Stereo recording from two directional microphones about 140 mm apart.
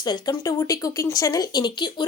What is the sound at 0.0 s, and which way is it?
Speech, 30° left (ahead or behind).